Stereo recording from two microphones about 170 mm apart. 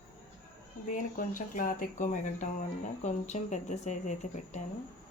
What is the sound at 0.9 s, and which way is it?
Speech, 50° left (ahead or behind).